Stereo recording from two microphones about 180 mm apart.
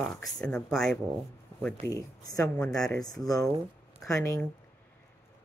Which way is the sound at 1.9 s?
20° left (ahead or behind).